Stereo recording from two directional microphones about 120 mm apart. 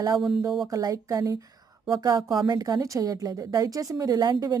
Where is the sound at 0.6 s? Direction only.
30° right (ahead or behind).